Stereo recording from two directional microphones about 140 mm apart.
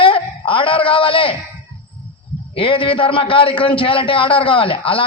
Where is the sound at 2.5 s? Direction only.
40° left (ahead or behind).